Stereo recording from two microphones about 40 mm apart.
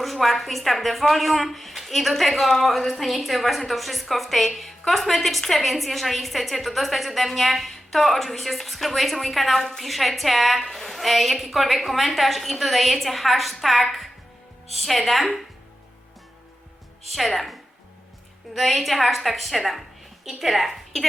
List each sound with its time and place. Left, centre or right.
0.0 s speech: centre
17.1 s a woman's voice: centre